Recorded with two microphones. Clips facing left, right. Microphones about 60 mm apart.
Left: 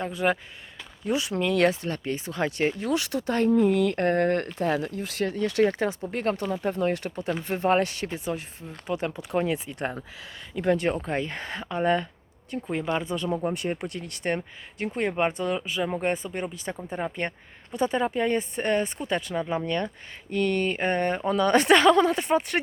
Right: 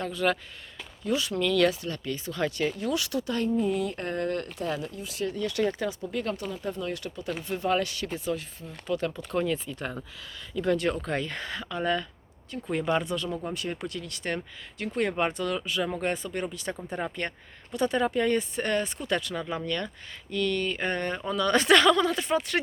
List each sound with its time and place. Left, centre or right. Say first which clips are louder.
0.0 s speech: left 2 dB; centre
2.6 s speech: left 3 dB; left
3.5 s speech: left 8 dB; left
5.3 s speech: left 5 dB; left; by 9.6 s centre
10.5 s speech: left 2 dB; left
12.6 s speech: right 1 dB; centre
13.1 s speech: left 4 dB; left
14.3 s speech: left 5 dB; left
20.3 s speech: left 3 dB; left